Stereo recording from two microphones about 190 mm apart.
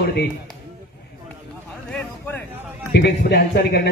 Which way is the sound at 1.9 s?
10° left (ahead or behind).